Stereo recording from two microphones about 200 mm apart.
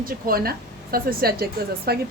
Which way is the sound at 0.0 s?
45° right (ahead or behind).